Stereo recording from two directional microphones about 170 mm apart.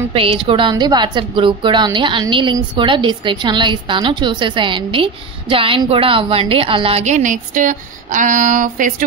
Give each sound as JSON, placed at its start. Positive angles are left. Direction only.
{"t": 0.1, "sound": "a woman's voice", "side_deg": -35}